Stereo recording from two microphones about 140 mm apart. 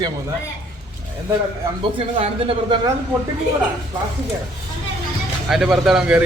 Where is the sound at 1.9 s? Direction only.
40° right (ahead or behind).